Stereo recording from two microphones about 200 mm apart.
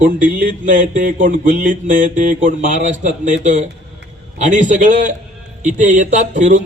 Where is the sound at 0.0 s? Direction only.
40° right (ahead or behind).